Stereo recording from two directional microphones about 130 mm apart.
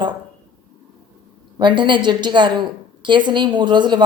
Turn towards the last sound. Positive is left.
turn(degrees=-35)  # may be behind; listen again after turning